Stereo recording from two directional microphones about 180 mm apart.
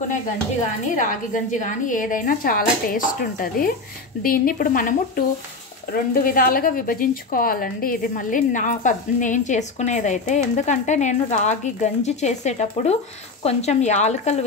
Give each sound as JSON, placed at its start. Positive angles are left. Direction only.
{"t": 0.8, "sound": "a woman's voice", "side_deg": 45}